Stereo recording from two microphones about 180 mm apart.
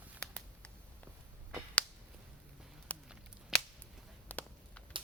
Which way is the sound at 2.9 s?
10° left (ahead or behind).